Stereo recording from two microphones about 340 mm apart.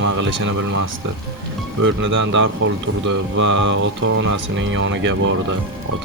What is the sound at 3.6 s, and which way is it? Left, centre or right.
Speech, right.